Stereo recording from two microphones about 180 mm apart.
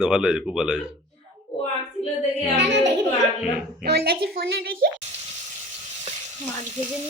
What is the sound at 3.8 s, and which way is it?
Speech, 60° right (ahead or behind).